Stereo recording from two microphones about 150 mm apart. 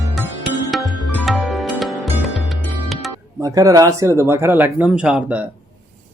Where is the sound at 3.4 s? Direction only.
20° right (ahead or behind).